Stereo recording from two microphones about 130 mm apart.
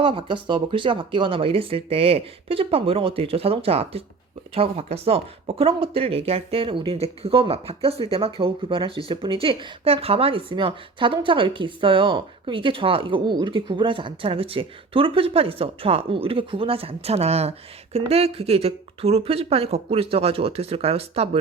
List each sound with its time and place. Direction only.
0.0 s speech: 40° right (ahead or behind)